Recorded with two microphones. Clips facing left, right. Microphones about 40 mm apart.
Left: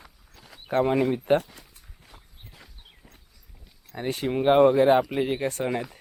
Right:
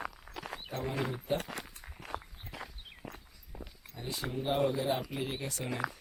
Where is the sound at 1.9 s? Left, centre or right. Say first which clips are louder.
Right 13 dB; right.